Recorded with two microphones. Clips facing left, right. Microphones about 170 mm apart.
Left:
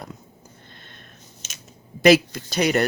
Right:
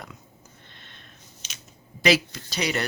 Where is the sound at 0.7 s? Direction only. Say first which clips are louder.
Left 4 dB; 45° left (ahead or behind).